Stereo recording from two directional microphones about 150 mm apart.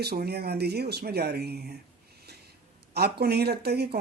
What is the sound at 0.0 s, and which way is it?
Speech, 90° right.